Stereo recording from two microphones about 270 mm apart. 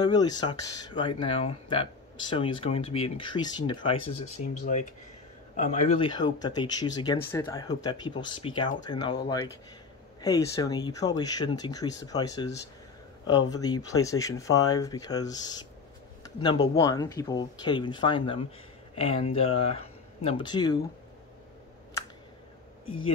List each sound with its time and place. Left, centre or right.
0.0 s speech: centre
5.6 s speech: left
10.2 s speech: centre